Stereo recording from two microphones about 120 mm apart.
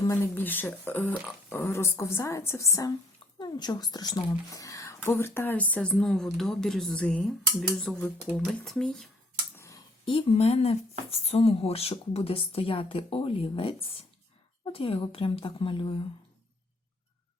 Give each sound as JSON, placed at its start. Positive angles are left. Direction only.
{"t": 0.1, "sound": "speech", "side_deg": 15}
{"t": 8.6, "sound": "speech", "side_deg": 0}
{"t": 9.6, "sound": "a sound", "side_deg": 25}
{"t": 10.1, "sound": "speech", "side_deg": 50}